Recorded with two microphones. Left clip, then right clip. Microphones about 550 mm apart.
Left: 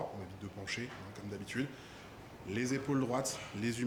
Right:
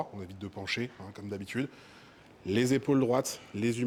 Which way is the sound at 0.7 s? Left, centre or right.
Right.